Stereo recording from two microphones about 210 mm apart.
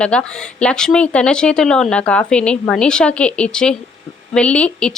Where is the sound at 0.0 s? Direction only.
5° left (ahead or behind).